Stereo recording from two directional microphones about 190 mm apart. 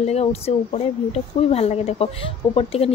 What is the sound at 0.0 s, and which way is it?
Speech, 35° left (ahead or behind).